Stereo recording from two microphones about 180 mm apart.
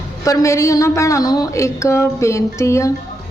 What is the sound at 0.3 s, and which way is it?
Speech, 15° left (ahead or behind).